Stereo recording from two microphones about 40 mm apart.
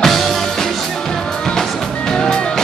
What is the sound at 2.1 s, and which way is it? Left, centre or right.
Music, left.